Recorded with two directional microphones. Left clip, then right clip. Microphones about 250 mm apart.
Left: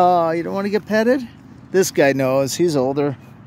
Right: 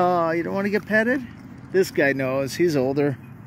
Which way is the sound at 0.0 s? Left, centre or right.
Centre.